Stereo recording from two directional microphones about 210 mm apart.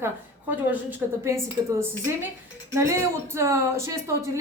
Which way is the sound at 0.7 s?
10° right (ahead or behind).